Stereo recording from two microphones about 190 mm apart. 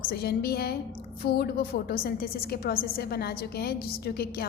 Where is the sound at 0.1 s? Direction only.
55° left (ahead or behind).